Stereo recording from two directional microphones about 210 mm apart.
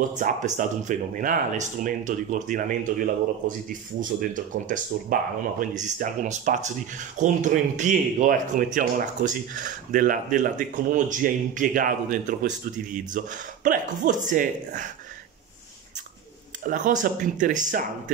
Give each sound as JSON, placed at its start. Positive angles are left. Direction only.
{"t": 0.2, "sound": "speech", "side_deg": -35}
{"t": 4.0, "sound": "speech", "side_deg": -40}
{"t": 16.6, "sound": "speech", "side_deg": -40}